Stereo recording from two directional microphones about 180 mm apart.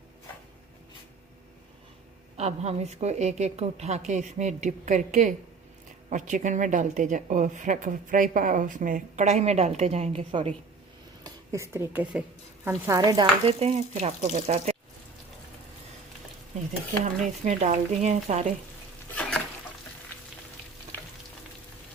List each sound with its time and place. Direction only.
2.3 s a woman's voice: 35° right (ahead or behind)
11.2 s speech: 15° right (ahead or behind)
13.4 s a woman's voice: 35° right (ahead or behind)
17.4 s speech: 45° right (ahead or behind)